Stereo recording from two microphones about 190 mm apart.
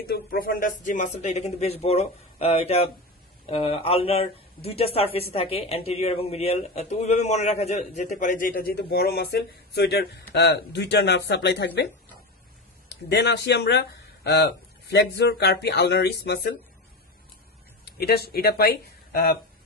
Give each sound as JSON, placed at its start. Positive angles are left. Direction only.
{"t": 0.1, "sound": "speech", "side_deg": 50}
{"t": 17.8, "sound": "speech", "side_deg": 55}